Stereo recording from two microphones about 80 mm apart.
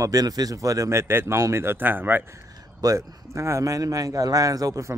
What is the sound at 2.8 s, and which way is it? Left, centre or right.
Speech, right.